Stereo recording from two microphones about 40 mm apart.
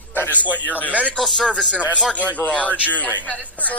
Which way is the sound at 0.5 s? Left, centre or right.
Left.